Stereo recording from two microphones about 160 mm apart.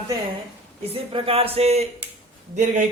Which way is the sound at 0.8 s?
35° right (ahead or behind).